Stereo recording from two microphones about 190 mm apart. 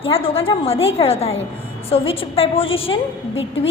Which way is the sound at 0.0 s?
30° left (ahead or behind).